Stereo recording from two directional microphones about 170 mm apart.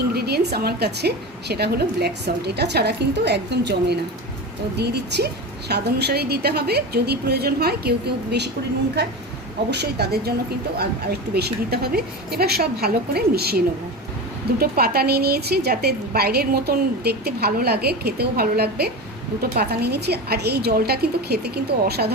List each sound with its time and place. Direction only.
0.1 s a woman's voice: 70° right (ahead or behind)
11.3 s a woman's voice: 70° right (ahead or behind)
14.6 s a woman's voice: 65° right (ahead or behind)